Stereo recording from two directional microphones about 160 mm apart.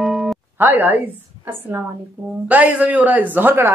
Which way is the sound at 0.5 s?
10° right (ahead or behind).